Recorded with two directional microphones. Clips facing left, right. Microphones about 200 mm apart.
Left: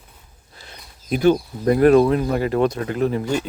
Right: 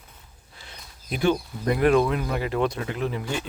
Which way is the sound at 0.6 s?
40° left (ahead or behind).